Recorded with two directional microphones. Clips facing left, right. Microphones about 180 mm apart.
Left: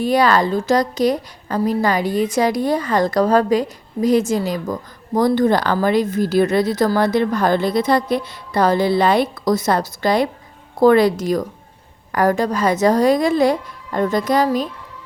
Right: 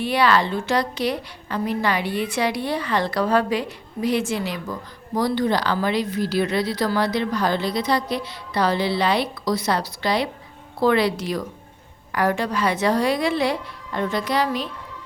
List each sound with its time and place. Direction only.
0.0 s a woman's voice: 45° left (ahead or behind)